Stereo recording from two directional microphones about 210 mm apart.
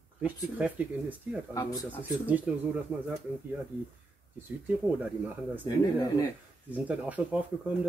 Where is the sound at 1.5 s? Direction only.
15° left (ahead or behind).